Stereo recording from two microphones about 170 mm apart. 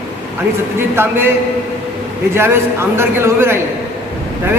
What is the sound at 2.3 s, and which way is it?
A man's voice, 15° right (ahead or behind).